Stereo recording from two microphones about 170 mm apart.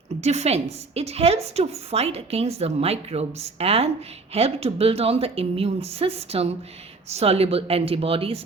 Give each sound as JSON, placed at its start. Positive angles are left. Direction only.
{"t": 0.2, "sound": "a woman's voice", "side_deg": -40}